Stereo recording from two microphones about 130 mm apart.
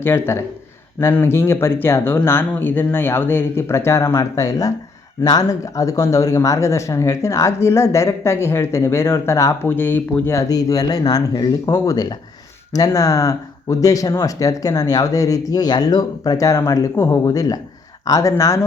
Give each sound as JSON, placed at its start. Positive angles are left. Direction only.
{"t": 0.0, "sound": "speech", "side_deg": 20}